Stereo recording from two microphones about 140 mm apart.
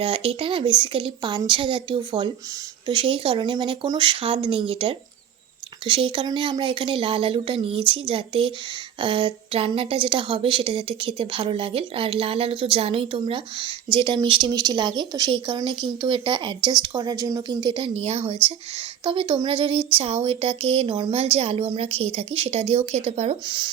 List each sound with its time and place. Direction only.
0.0 s a woman's voice: 40° right (ahead or behind)
19.0 s a woman's voice: 35° right (ahead or behind)